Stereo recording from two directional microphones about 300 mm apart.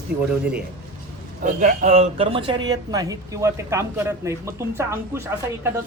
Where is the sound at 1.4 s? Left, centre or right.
Right.